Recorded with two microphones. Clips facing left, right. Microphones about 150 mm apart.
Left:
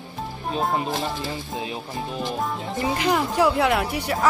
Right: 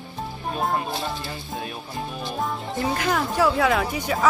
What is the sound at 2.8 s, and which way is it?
Speech, 15° left (ahead or behind).